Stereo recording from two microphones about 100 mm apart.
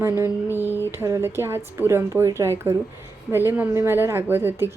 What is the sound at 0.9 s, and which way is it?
Speech, 25° right (ahead or behind).